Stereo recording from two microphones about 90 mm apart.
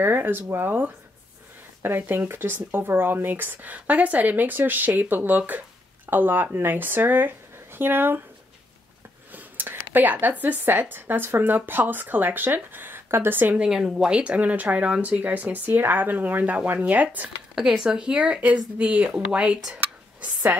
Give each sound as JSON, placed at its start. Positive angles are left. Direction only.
{"t": 0.0, "sound": "speech", "side_deg": -20}
{"t": 9.3, "sound": "a sound", "side_deg": -20}
{"t": 10.4, "sound": "speech", "side_deg": -20}
{"t": 13.6, "sound": "speech", "side_deg": -5}